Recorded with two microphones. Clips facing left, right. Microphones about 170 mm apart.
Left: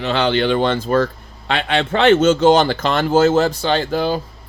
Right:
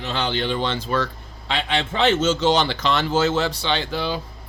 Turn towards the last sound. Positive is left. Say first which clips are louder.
# left 6 dB
turn(degrees=45)  # may be behind; listen again after turning